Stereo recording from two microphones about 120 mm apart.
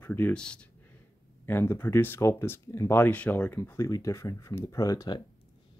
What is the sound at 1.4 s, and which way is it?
Speech, 20° left (ahead or behind).